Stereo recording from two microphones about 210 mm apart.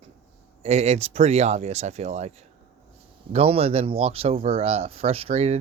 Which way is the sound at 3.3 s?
30° right (ahead or behind).